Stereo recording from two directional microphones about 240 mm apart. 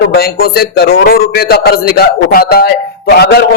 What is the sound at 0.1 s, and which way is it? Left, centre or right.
A man's voice, left.